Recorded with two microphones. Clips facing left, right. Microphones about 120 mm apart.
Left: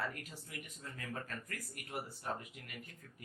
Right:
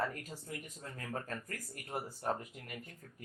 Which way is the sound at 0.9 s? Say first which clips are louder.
Right 3 dB; 40° right (ahead or behind).